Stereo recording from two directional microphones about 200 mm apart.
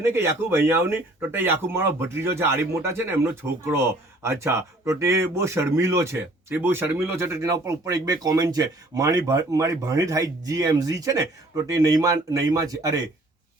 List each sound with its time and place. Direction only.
0.0 s speech: 10° right (ahead or behind)